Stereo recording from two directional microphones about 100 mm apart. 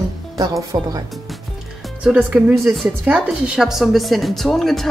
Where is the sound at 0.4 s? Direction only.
40° right (ahead or behind).